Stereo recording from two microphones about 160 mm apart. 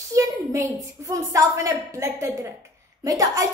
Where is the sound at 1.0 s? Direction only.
20° right (ahead or behind).